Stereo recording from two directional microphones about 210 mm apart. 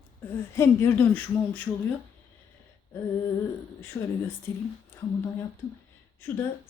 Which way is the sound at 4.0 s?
15° left (ahead or behind).